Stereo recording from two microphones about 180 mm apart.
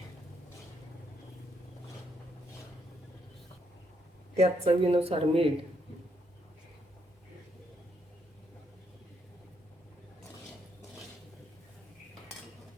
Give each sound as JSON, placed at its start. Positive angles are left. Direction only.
{"t": 4.4, "sound": "speech", "side_deg": -35}